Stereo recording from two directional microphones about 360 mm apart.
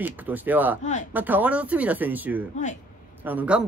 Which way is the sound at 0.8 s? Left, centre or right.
Centre.